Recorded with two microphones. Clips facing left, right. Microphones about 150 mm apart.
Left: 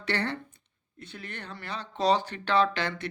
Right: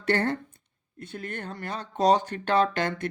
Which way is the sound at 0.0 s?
45° right (ahead or behind).